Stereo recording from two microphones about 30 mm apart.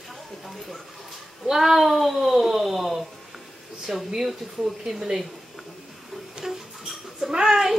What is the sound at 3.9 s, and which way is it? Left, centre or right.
Speech, centre.